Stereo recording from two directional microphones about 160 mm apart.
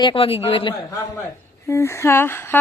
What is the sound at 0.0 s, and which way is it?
Speech, 35° left (ahead or behind).